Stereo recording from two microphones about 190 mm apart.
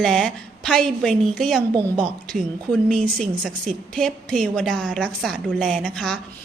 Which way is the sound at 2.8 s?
5° left (ahead or behind).